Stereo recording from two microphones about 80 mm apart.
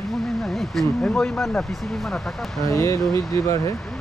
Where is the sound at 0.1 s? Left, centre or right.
Centre.